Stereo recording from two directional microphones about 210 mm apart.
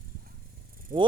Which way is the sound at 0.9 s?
40° right (ahead or behind).